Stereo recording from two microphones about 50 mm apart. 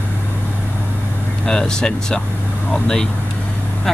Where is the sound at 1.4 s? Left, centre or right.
Centre.